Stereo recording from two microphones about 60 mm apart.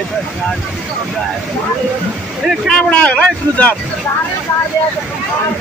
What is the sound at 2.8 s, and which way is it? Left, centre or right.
Speech, centre.